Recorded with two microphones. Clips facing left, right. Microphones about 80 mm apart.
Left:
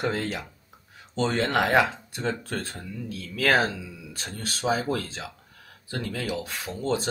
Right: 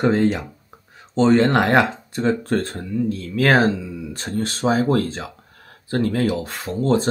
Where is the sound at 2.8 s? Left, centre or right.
Right.